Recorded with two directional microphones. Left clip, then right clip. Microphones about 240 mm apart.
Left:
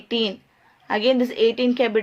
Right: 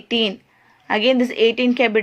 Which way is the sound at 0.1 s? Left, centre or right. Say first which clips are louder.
Right 3 dB; right.